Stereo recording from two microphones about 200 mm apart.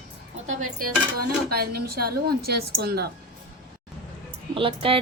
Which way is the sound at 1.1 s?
50° right (ahead or behind).